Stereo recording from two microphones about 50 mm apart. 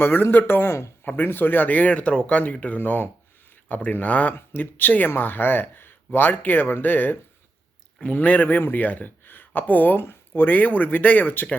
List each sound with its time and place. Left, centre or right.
0.0 s speech: left